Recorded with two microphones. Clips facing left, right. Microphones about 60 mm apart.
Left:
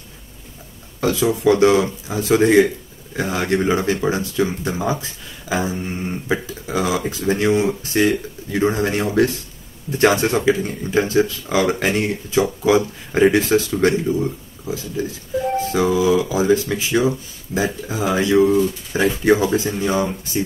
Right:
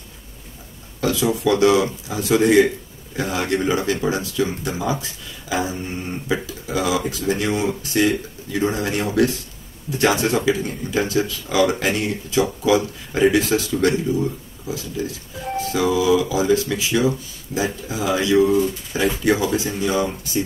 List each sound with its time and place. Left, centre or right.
1.4 s speech: left
15.5 s speech: left